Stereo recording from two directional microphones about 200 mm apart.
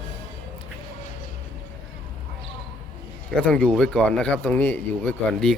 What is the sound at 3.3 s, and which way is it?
Speech, 5° left (ahead or behind).